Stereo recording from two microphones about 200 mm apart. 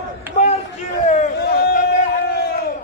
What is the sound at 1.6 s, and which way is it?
Crowd, 45° left (ahead or behind).